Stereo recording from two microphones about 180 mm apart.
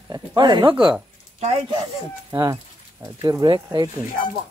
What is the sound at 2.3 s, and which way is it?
Speech, 15° right (ahead or behind).